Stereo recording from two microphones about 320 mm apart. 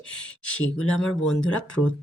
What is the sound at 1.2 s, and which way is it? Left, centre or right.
Speech, left.